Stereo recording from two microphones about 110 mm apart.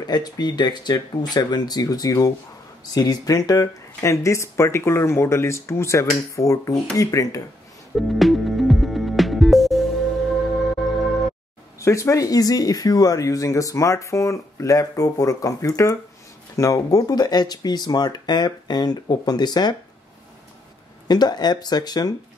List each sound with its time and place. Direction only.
0.0 s speech: 40° left (ahead or behind)
7.9 s music: centre (ahead or behind)
11.8 s speech: 30° left (ahead or behind)
21.1 s speech: 40° left (ahead or behind)